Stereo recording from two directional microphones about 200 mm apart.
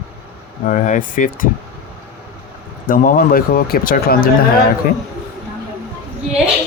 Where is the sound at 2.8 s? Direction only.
45° left (ahead or behind).